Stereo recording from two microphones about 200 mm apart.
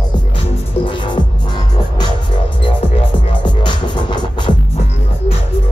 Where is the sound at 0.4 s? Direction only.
25° left (ahead or behind).